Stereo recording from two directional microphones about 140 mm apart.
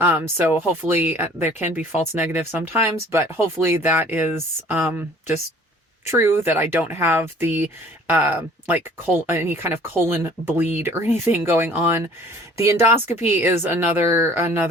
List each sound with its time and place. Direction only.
0.0 s speech: 15° right (ahead or behind)
6.1 s speech: 15° right (ahead or behind)